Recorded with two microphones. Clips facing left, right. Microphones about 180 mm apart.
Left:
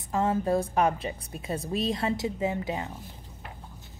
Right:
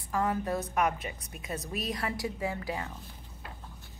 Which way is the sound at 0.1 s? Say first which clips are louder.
Left 5 dB; 25° left (ahead or behind).